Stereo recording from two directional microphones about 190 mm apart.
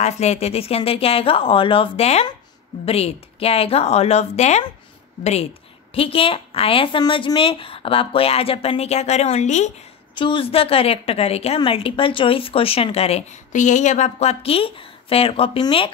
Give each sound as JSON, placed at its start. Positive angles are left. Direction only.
{"t": 0.0, "sound": "a woman's voice", "side_deg": 35}
{"t": 10.1, "sound": "a woman's voice", "side_deg": 25}